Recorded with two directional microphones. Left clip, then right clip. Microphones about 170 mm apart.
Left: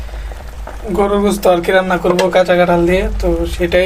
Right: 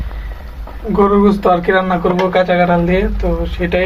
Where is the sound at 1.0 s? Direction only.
20° left (ahead or behind).